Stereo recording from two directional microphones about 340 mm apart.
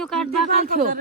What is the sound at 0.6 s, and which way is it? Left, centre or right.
Speech, right.